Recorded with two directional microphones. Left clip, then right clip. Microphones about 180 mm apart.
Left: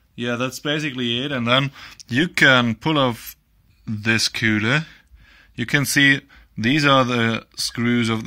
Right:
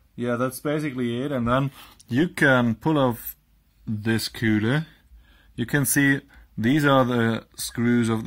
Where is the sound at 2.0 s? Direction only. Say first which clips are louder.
Left 5 dB; 15° left (ahead or behind).